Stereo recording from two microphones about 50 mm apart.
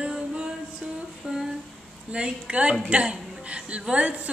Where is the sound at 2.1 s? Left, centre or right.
Right.